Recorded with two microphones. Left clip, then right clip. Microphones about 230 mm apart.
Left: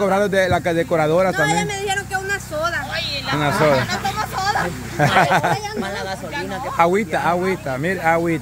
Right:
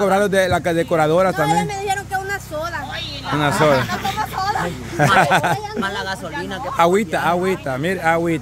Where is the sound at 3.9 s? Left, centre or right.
Centre.